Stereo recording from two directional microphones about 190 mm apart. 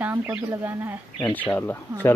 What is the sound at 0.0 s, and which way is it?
Speech, 10° right (ahead or behind).